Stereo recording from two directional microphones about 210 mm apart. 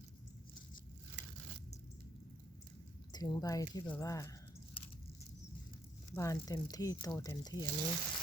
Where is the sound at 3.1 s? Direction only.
20° left (ahead or behind).